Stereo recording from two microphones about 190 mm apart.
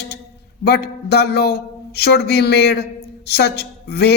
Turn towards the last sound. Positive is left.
turn(degrees=60)  # may be behind; listen again after turning